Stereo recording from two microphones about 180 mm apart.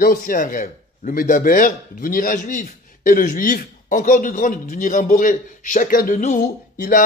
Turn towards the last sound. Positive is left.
turn(degrees=45)  # may be behind; listen again after turning